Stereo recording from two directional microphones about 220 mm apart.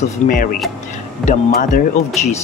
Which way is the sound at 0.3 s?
40° left (ahead or behind).